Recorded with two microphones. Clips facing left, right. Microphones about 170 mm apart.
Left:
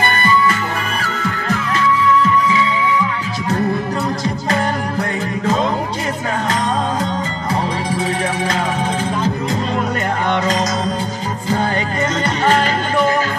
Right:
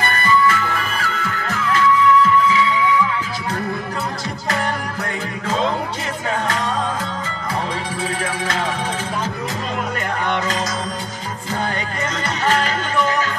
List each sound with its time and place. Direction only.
0.0 s music: 25° left (ahead or behind)
12.4 s music: 30° left (ahead or behind)